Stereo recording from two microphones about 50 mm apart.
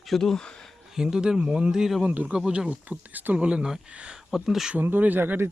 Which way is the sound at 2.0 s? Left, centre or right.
Right.